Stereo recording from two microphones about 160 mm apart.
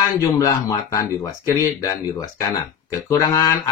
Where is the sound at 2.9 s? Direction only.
25° left (ahead or behind).